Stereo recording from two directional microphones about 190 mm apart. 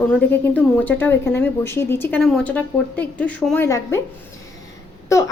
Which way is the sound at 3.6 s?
15° left (ahead or behind).